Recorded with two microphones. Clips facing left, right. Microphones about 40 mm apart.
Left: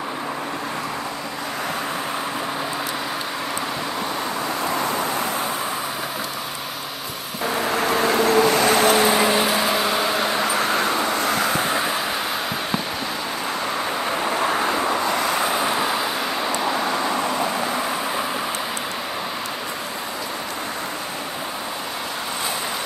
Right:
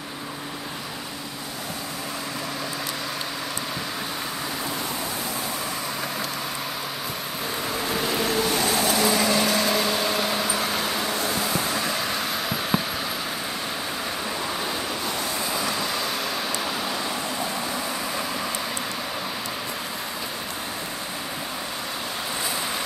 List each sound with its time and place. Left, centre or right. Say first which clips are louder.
8.0 s vehicle: left 8 dB; left
8.9 s vehicle: left 4 dB; left; by 10.4 s centre
11.2 s vehicle: left 5 dB; left
14.7 s vehicle: left 7 dB; left
15.5 s vehicle: left 5 dB; left